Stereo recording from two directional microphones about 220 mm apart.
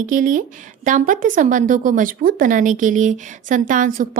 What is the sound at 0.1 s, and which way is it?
A woman's voice, 35° right (ahead or behind).